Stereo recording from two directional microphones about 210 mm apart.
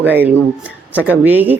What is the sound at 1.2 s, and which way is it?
Speech, 10° right (ahead or behind).